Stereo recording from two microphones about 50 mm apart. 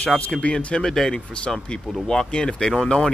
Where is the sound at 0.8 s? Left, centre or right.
Centre.